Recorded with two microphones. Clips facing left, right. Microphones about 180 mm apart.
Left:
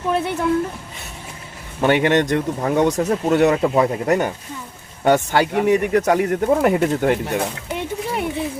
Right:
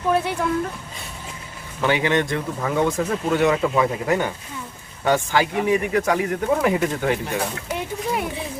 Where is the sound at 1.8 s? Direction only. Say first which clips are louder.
Left 4 dB; 55° left (ahead or behind).